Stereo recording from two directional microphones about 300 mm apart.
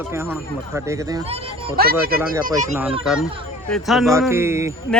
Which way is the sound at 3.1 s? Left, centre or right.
Centre.